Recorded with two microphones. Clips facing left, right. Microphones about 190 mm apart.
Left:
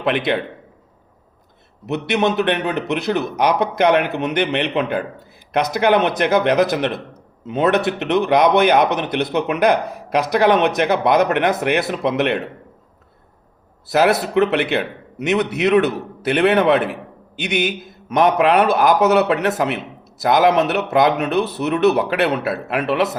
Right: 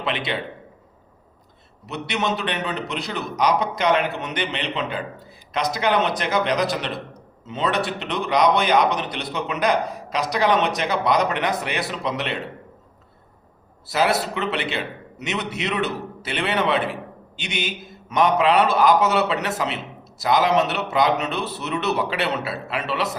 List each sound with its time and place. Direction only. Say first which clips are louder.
0.0 s a man's voice: left 7 dB; 55° left (ahead or behind)
1.9 s a man's voice: left 7 dB; 60° left (ahead or behind)
14.3 s a man's voice: left 9 dB; 60° left (ahead or behind)